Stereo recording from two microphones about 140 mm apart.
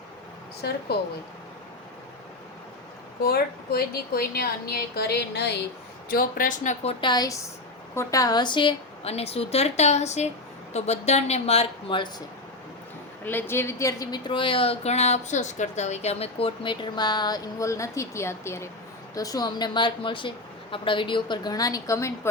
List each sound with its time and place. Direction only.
3.2 s a woman's voice: 90° left
6.1 s speech: 85° left
6.8 s a woman's voice: 35° left (ahead or behind)
13.2 s a woman's voice: 15° left (ahead or behind)